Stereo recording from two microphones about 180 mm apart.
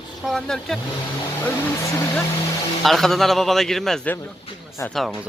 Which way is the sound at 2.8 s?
Centre (ahead or behind).